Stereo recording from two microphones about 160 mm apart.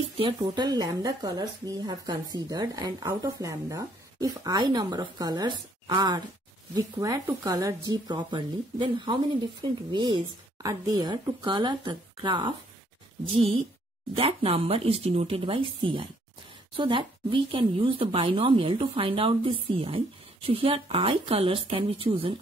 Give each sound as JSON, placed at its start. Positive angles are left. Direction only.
{"t": 0.2, "sound": "a woman's voice", "side_deg": -25}